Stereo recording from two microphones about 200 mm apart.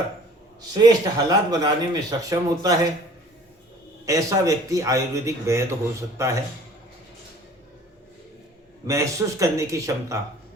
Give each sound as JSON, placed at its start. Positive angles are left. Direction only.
{"t": 0.7, "sound": "speech", "side_deg": -20}
{"t": 4.0, "sound": "a man's voice", "side_deg": -15}
{"t": 8.9, "sound": "a man's voice", "side_deg": -15}